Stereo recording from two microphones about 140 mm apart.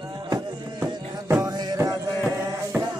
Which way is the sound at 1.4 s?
30° right (ahead or behind).